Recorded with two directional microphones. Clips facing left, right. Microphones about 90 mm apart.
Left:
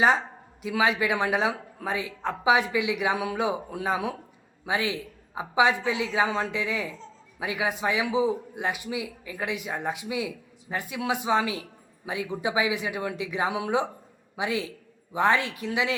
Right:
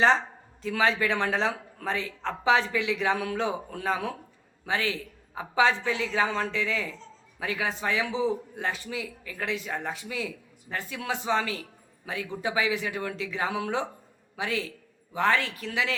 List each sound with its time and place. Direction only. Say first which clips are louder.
0.6 s a man's voice: left 1 dB; 15° left (ahead or behind)